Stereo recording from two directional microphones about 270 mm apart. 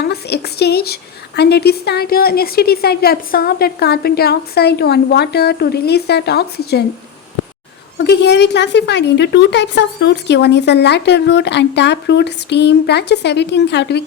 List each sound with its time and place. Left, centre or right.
0.0 s a woman's voice: left
7.9 s a woman's voice: left